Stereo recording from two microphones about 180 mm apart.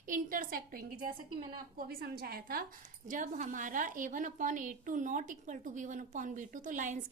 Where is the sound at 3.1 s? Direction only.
45° right (ahead or behind).